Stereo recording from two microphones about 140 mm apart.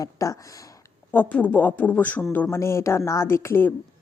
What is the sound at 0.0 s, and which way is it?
Speech, 25° left (ahead or behind).